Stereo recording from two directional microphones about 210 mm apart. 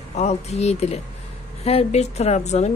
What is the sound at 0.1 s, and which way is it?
A woman's voice, 30° left (ahead or behind).